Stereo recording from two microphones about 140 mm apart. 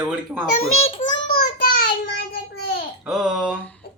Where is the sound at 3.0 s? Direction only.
Centre (ahead or behind).